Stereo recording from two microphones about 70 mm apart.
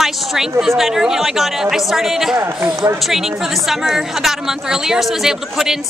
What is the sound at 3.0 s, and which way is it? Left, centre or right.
A woman's voice, centre.